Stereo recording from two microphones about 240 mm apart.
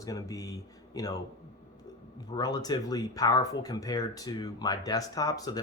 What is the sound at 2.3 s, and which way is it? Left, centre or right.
Speech, centre.